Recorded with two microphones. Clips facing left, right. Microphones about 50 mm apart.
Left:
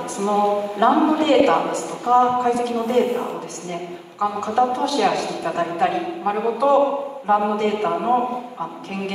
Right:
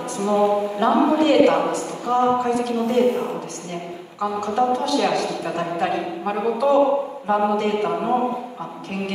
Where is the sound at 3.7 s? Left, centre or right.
Left.